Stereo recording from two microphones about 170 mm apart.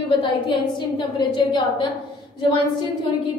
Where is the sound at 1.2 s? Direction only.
25° left (ahead or behind).